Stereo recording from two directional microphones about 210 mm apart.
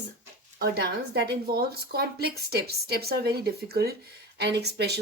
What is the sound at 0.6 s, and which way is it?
Speech, 50° right (ahead or behind).